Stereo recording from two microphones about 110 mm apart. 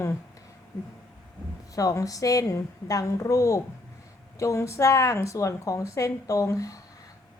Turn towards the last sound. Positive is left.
turn(degrees=30)  # may be behind; listen again after turning